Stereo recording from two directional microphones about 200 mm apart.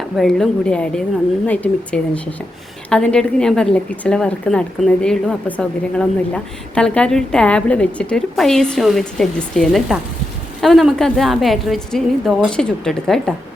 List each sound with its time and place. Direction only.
0.2 s a woman's voice: 5° left (ahead or behind)